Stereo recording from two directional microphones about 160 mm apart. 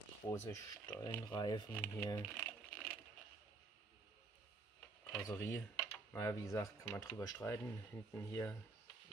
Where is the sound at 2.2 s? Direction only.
10° left (ahead or behind).